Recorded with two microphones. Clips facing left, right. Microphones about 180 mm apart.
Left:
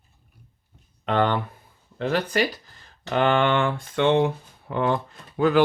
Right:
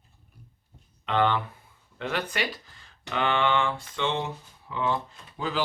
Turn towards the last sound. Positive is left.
turn(degrees=60)  # may be behind; listen again after turning